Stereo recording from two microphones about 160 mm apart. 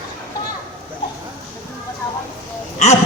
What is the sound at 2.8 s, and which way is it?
Speech, 45° left (ahead or behind).